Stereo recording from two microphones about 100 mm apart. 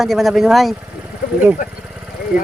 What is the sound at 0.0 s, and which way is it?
Speech, centre (ahead or behind).